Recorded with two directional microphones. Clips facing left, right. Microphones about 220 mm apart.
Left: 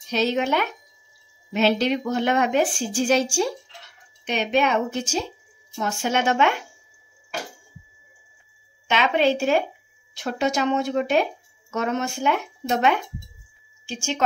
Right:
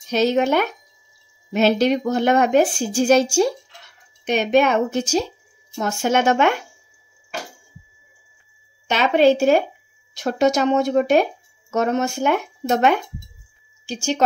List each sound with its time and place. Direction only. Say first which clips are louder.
0.1 s speech: right 5 dB; 45° right (ahead or behind)
8.8 s a woman's voice: right 5 dB; 40° right (ahead or behind)